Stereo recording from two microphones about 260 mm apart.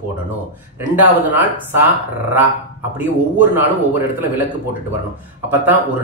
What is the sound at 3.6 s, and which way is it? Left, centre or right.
Speech, centre.